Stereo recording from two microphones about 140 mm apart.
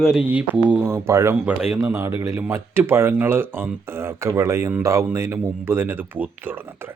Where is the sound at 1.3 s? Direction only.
10° right (ahead or behind).